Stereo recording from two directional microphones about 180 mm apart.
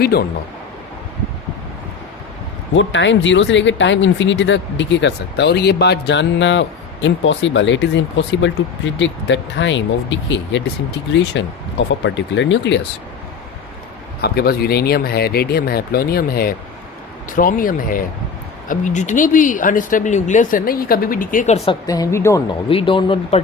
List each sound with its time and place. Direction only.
0.0 s speech: 60° left (ahead or behind)
2.7 s speech: 90° left
11.1 s speech: 80° left
14.2 s speech: 60° left (ahead or behind); by 21.8 s 35° left (ahead or behind)
21.8 s speech: 20° left (ahead or behind)
22.7 s speech: 30° left (ahead or behind)